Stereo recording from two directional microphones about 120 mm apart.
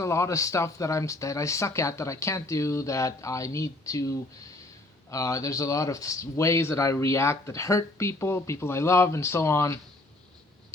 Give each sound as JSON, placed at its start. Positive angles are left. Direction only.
{"t": 0.0, "sound": "speech", "side_deg": 25}
{"t": 5.1, "sound": "speech", "side_deg": 25}